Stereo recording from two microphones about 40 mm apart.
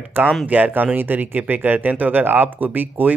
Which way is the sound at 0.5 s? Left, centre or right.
Right.